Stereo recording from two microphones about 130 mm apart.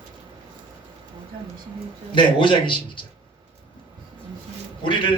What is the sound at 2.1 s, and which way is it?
Speech, 40° left (ahead or behind).